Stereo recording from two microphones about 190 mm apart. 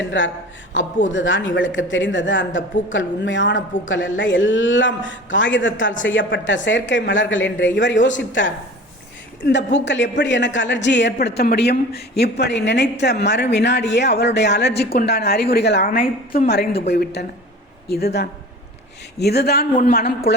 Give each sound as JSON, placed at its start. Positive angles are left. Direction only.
{"t": 0.1, "sound": "a woman's voice", "side_deg": 75}
{"t": 15.9, "sound": "a man's voice", "side_deg": 45}